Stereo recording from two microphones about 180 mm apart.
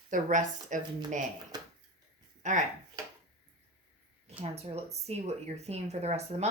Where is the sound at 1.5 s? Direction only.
20° right (ahead or behind).